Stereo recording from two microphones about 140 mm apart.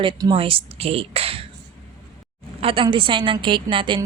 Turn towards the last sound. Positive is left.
turn(degrees=-35)  # may be behind; listen again after turning